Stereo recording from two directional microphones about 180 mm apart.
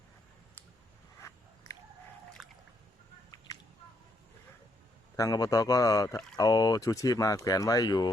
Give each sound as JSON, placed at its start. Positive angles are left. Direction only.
{"t": 1.2, "sound": "biting", "side_deg": 15}
{"t": 2.4, "sound": "drip", "side_deg": 0}
{"t": 3.3, "sound": "a sound", "side_deg": 20}
{"t": 5.1, "sound": "speech", "side_deg": 20}